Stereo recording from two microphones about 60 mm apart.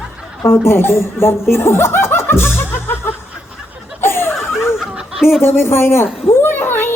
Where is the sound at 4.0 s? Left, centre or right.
Left.